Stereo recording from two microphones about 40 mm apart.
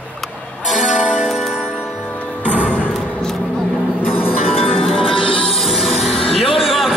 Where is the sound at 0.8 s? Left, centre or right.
Right.